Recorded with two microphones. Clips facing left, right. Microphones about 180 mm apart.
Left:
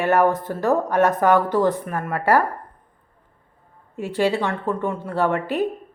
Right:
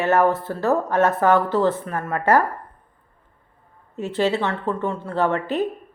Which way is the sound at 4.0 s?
10° left (ahead or behind).